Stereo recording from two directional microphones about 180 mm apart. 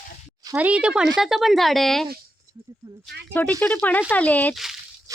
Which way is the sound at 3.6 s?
10° left (ahead or behind).